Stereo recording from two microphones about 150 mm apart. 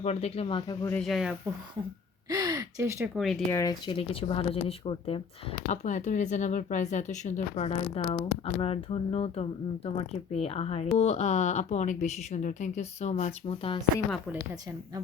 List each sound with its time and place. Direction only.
0.0 s speech: 45° left (ahead or behind)
0.7 s speech: 25° left (ahead or behind)
0.9 s speech: centre (ahead or behind)
2.3 s speech: 25° right (ahead or behind)
3.5 s speech: 20° left (ahead or behind)
3.8 s speech: 40° left (ahead or behind)
5.6 s speech: 55° left (ahead or behind); by 13.8 s 40° left (ahead or behind)